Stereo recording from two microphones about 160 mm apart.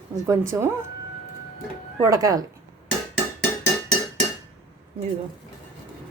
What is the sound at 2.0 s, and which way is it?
Speech, 20° right (ahead or behind).